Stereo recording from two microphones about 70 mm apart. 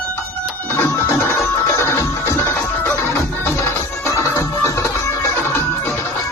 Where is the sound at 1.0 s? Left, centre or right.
Left.